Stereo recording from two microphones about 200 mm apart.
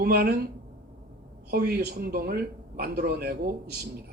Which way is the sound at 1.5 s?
50° right (ahead or behind).